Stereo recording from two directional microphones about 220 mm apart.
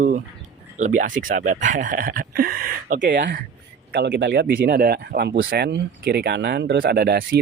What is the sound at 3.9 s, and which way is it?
Speech, 50° right (ahead or behind).